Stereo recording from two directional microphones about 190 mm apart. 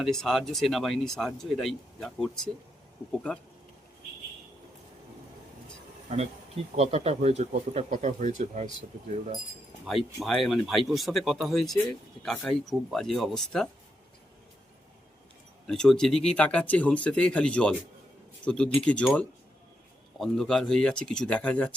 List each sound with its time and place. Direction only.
0.0 s speech: centre (ahead or behind)
6.1 s speech: 40° right (ahead or behind)
10.2 s speech: centre (ahead or behind)
15.7 s speech: 5° left (ahead or behind)